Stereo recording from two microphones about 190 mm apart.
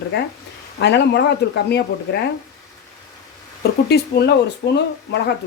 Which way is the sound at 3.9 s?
60° left (ahead or behind).